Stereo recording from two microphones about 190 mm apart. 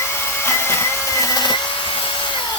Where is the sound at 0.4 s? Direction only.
15° left (ahead or behind).